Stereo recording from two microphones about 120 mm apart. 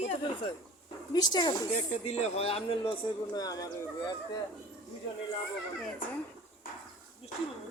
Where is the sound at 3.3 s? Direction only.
30° left (ahead or behind).